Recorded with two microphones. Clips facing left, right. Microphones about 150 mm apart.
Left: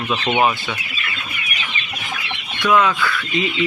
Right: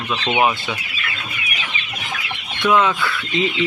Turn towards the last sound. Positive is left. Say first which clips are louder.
# left 1 dB
turn(degrees=-25)  # may be behind; listen again after turning